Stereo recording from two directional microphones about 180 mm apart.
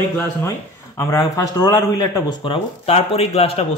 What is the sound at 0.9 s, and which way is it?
Speech, 20° left (ahead or behind).